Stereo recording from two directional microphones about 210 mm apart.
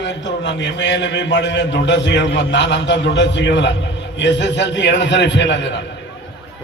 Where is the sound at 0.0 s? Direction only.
55° left (ahead or behind).